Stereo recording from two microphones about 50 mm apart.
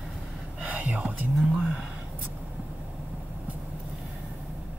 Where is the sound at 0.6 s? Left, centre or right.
Right.